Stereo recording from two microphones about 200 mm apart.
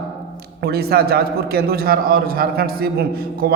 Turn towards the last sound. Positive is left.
turn(degrees=-50)  # may be behind; listen again after turning